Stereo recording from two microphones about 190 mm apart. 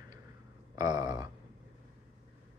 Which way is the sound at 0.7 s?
20° right (ahead or behind).